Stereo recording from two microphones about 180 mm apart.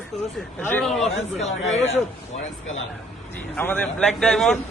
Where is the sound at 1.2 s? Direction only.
35° left (ahead or behind).